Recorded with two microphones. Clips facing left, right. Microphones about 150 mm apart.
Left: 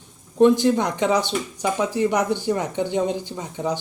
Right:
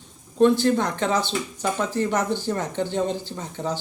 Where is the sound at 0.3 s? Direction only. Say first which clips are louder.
Left 2 dB; 15° left (ahead or behind).